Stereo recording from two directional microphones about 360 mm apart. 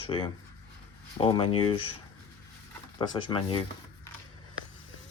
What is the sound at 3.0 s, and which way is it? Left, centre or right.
Speech, centre.